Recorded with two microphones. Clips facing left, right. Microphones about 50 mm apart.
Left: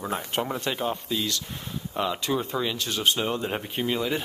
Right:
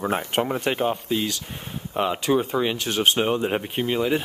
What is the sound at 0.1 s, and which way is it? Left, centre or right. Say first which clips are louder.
Speech: right 5 dB; right.